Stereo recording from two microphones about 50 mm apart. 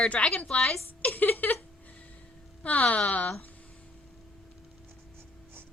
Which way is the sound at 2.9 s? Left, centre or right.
Left.